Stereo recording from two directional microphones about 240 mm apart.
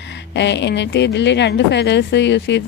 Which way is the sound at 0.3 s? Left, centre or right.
Left.